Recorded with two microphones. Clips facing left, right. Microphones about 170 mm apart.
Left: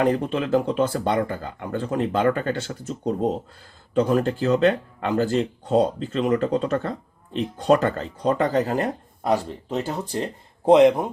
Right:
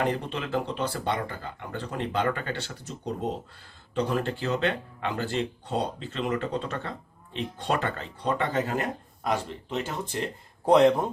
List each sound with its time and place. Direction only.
0.0 s speech: 45° left (ahead or behind)
10.7 s speech: 20° left (ahead or behind)